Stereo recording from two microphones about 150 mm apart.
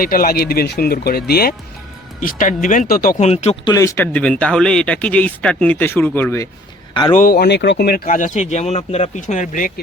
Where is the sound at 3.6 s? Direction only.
20° left (ahead or behind).